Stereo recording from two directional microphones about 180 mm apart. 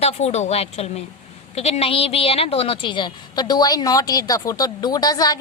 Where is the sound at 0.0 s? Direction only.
35° left (ahead or behind).